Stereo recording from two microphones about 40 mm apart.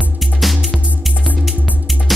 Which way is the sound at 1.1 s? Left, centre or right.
Left.